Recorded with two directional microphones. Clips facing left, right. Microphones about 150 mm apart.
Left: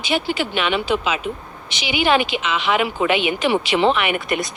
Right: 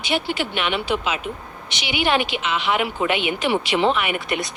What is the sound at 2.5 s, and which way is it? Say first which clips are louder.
Speech: left 2 dB; 90° left.